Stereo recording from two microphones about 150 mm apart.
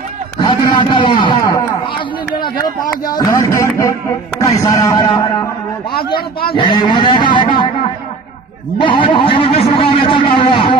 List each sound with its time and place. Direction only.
0.4 s a sound: 30° left (ahead or behind)
3.1 s music: 25° left (ahead or behind)
4.4 s a man's voice: 20° left (ahead or behind)
5.9 s a man's voice: 90° left
6.5 s a man's voice: 30° left (ahead or behind)
8.7 s a sound: 35° left (ahead or behind)